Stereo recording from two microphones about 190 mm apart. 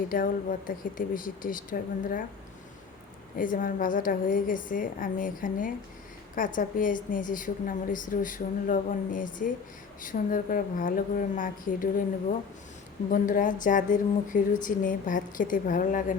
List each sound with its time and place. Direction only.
0.1 s a woman's voice: 45° left (ahead or behind)
3.3 s a woman's voice: 45° left (ahead or behind)
13.1 s a woman's voice: 45° left (ahead or behind)